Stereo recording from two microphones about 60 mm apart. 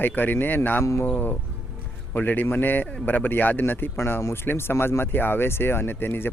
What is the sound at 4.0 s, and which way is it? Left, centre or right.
Speech, left.